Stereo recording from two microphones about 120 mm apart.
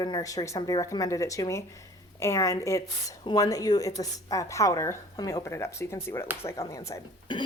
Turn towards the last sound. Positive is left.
turn(degrees=40)  # may be behind; listen again after turning